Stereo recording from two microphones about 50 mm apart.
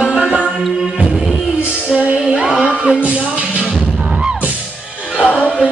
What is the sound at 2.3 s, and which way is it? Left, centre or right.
Heart murmur, centre.